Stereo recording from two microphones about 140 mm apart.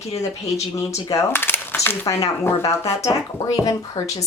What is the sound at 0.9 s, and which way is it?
Speech, 20° left (ahead or behind).